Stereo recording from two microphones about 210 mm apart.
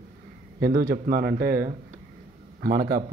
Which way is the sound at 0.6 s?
45° right (ahead or behind).